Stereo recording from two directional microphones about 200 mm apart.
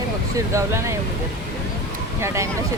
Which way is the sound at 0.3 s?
15° right (ahead or behind).